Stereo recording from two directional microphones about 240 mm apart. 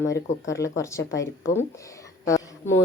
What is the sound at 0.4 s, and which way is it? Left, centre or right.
A woman's voice, centre.